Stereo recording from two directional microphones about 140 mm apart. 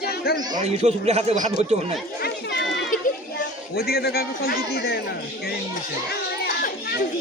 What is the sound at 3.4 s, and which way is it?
A man's voice, 90° left.